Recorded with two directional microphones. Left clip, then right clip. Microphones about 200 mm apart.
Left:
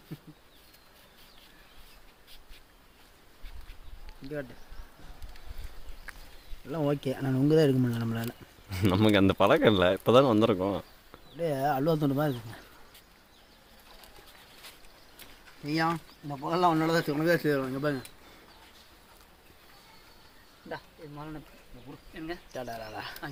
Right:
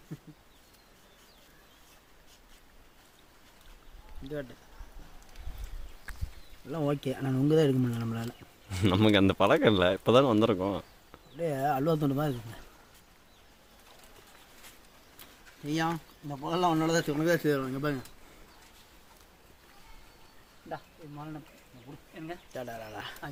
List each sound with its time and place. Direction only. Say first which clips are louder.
6.7 s speech: left 2 dB; centre (ahead or behind)
8.7 s speech: even; centre (ahead or behind)
15.6 s speech: left 2 dB; centre (ahead or behind)
20.7 s insect: left 1 dB; 45° left (ahead or behind)
22.5 s speech: even; centre (ahead or behind)